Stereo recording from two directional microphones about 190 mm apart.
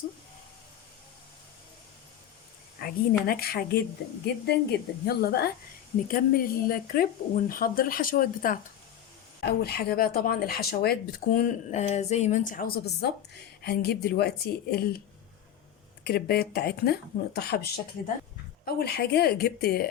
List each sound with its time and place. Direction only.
2.8 s speech: 55° left (ahead or behind)
16.0 s speech: 55° left (ahead or behind)